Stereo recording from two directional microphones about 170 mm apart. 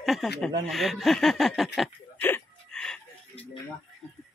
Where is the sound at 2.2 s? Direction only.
5° left (ahead or behind).